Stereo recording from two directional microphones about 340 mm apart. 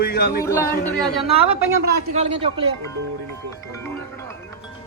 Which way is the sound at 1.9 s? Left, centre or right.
Right.